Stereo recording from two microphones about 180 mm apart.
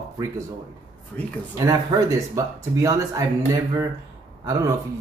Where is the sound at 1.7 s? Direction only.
15° right (ahead or behind).